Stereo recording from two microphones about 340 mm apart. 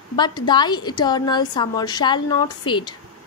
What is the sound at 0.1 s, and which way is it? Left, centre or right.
A woman's voice, centre.